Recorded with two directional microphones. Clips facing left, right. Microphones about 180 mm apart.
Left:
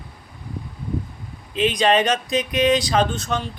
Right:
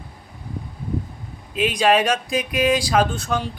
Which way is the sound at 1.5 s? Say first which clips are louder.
Even; 5° right (ahead or behind).